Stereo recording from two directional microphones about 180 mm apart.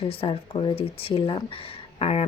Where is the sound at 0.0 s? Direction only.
30° left (ahead or behind).